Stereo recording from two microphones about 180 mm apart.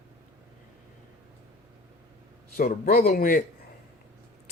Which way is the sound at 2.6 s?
55° left (ahead or behind).